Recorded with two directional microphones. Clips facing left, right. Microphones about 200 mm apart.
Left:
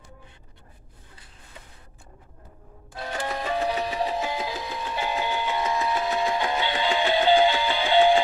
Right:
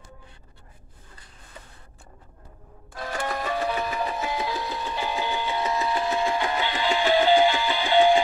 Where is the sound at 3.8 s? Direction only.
30° left (ahead or behind).